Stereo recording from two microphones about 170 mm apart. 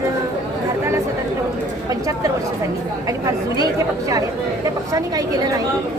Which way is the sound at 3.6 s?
20° right (ahead or behind).